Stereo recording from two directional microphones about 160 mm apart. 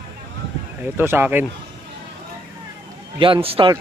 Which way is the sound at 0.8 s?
15° right (ahead or behind).